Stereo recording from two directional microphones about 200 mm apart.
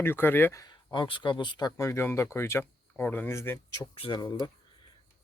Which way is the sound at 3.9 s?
25° left (ahead or behind).